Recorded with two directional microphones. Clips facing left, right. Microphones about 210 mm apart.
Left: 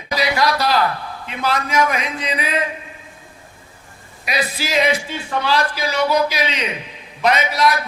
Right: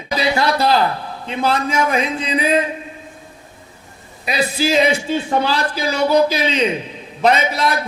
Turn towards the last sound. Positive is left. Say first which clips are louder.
# even
turn(degrees=-30)  # may be behind; listen again after turning